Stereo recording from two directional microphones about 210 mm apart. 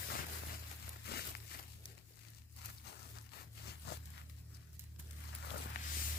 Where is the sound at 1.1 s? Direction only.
50° left (ahead or behind).